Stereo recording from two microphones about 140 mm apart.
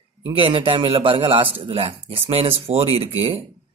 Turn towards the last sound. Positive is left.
turn(degrees=-45)  # may be behind; listen again after turning